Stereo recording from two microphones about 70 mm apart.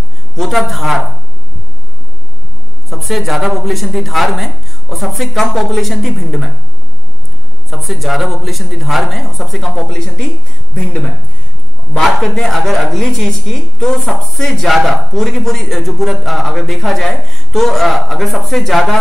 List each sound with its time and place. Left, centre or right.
0.4 s a man's voice: centre
2.9 s a man's voice: centre
7.7 s a man's voice: centre
10.7 s speech: centre
11.9 s a man's voice: centre